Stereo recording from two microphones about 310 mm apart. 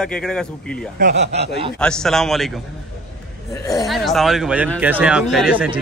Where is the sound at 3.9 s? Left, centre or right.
Centre.